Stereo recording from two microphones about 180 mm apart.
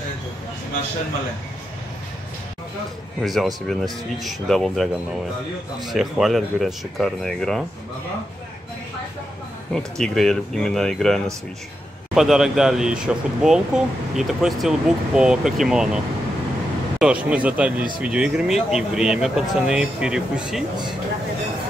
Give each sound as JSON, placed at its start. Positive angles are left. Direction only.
{"t": 3.2, "sound": "speech", "side_deg": 0}
{"t": 5.9, "sound": "speech", "side_deg": 0}
{"t": 9.9, "sound": "speech", "side_deg": 5}
{"t": 17.0, "sound": "speech", "side_deg": -5}